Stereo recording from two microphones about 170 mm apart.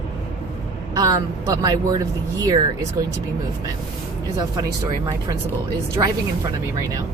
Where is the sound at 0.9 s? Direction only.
20° right (ahead or behind).